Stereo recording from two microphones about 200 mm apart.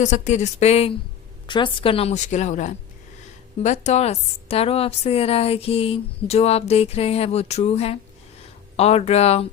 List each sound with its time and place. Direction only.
0.0 s a woman's voice: 35° left (ahead or behind)